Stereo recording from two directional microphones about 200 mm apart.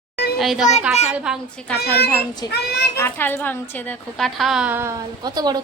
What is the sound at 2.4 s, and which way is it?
A child's voice, 20° left (ahead or behind).